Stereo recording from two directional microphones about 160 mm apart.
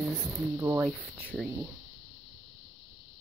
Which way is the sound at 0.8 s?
Centre (ahead or behind).